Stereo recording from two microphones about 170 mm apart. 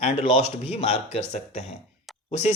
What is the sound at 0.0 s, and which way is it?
Speech, 40° left (ahead or behind).